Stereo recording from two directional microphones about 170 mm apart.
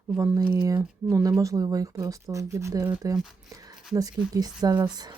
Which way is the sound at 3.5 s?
20° right (ahead or behind).